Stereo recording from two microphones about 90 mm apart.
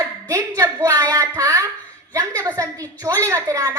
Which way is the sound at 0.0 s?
35° right (ahead or behind).